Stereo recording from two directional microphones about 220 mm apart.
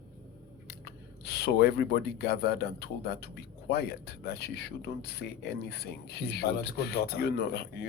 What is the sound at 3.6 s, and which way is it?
Speech, 45° left (ahead or behind).